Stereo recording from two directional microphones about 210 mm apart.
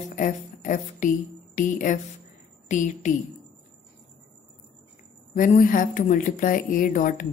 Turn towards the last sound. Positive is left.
turn(degrees=40)  # may be behind; listen again after turning